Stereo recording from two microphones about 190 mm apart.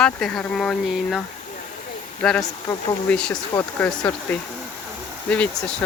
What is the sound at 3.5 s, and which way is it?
Speech, 15° left (ahead or behind).